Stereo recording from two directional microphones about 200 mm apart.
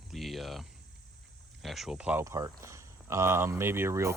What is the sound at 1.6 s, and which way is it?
Speech, centre (ahead or behind).